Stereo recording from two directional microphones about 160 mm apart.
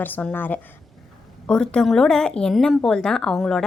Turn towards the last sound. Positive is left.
turn(degrees=0)  # may be behind; listen again after turning